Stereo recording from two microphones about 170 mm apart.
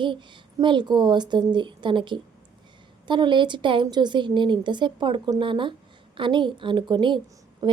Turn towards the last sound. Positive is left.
turn(degrees=-25)  # may be behind; listen again after turning